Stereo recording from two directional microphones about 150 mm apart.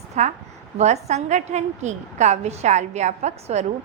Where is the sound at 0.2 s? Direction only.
50° right (ahead or behind).